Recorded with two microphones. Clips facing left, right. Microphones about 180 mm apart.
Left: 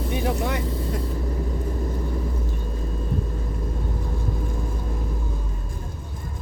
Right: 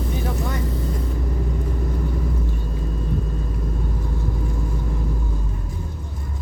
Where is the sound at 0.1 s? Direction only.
75° left (ahead or behind).